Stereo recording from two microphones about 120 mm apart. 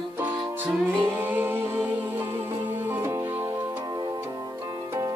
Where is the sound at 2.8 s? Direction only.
20° right (ahead or behind).